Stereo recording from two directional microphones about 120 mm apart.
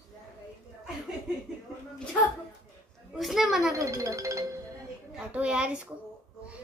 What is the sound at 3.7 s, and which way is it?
Speech, 25° right (ahead or behind).